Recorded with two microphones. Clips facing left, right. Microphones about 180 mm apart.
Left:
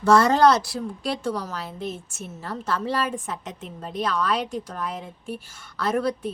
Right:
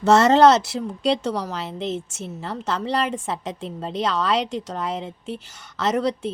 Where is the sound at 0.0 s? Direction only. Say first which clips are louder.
Right 3 dB; 25° right (ahead or behind).